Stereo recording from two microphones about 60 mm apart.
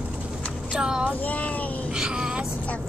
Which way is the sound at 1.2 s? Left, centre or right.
Left.